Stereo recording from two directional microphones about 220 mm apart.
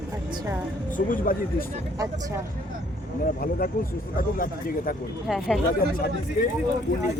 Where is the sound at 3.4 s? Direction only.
40° left (ahead or behind).